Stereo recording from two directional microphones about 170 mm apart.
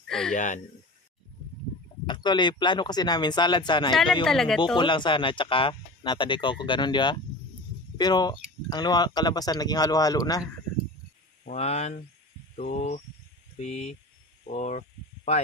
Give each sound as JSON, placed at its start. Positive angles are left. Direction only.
{"t": 0.1, "sound": "speech", "side_deg": 5}
{"t": 2.0, "sound": "speech", "side_deg": 25}
{"t": 4.3, "sound": "speech", "side_deg": 5}
{"t": 4.7, "sound": "speech", "side_deg": 30}
{"t": 11.4, "sound": "speech", "side_deg": 40}
{"t": 14.5, "sound": "a sound", "side_deg": 45}